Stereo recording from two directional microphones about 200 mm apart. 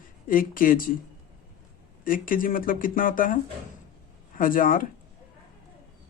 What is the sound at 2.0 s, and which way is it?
Speech, 45° left (ahead or behind).